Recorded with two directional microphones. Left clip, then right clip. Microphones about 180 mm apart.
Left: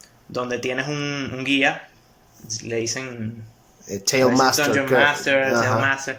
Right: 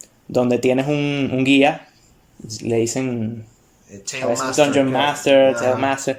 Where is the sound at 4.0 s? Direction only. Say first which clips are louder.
Left 9 dB; 45° left (ahead or behind).